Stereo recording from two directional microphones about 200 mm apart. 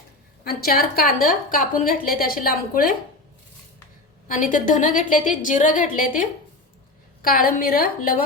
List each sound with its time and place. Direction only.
0.4 s a woman's voice: 50° left (ahead or behind)
4.4 s a woman's voice: 40° left (ahead or behind)